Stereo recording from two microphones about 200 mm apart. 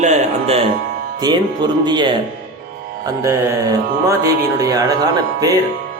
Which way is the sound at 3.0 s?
15° right (ahead or behind).